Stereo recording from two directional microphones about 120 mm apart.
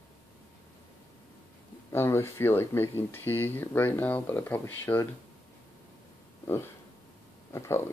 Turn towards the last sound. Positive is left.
turn(degrees=25)  # may be behind; listen again after turning